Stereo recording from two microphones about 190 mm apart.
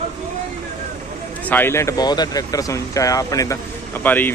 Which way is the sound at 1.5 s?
10° left (ahead or behind).